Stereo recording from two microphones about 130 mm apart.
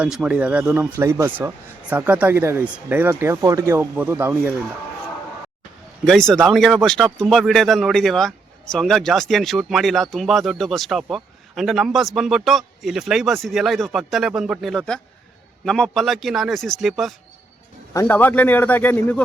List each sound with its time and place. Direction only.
0.0 s speech: 10° right (ahead or behind)
0.8 s speech: 20° right (ahead or behind)
6.1 s speech: 5° left (ahead or behind)
17.9 s a man's voice: 20° left (ahead or behind)